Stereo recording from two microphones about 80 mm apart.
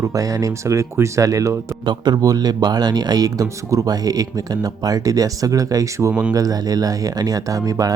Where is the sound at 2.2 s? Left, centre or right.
Right.